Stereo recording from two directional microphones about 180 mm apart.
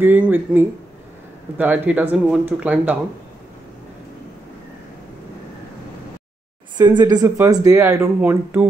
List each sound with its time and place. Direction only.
0.0 s speech: 10° right (ahead or behind)
6.8 s speech: 25° right (ahead or behind)